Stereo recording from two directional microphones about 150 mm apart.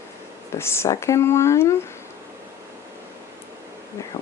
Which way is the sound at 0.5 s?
15° left (ahead or behind).